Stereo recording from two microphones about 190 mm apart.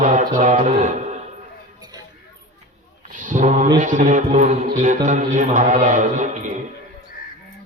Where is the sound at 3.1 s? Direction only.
40° right (ahead or behind).